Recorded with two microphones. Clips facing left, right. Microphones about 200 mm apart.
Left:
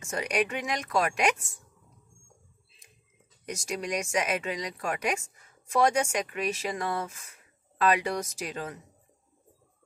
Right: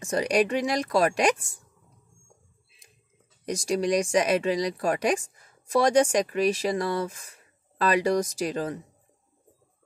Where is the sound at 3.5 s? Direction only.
35° right (ahead or behind).